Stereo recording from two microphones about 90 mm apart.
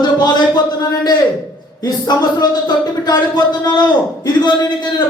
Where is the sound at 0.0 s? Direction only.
45° left (ahead or behind).